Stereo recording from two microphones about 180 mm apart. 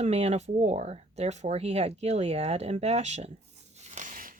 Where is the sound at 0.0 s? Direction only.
40° right (ahead or behind).